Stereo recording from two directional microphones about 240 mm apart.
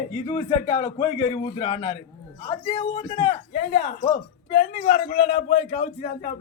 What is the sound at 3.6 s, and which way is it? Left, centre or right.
A man's voice, left.